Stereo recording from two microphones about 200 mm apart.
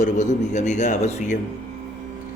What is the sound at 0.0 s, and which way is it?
A man's voice, 35° left (ahead or behind).